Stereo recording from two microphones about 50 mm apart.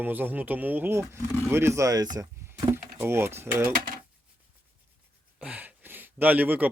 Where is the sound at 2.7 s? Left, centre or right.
Right.